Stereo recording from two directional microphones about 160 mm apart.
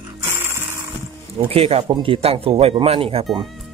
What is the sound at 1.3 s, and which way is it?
Speech, 35° right (ahead or behind).